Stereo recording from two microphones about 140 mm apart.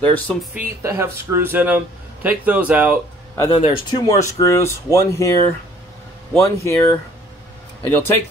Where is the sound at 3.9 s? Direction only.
25° left (ahead or behind).